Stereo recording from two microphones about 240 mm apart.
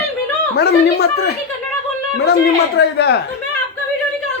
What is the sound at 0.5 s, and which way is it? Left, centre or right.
Speech, left.